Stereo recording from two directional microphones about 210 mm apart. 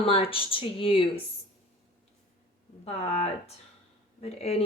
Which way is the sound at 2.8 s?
30° left (ahead or behind).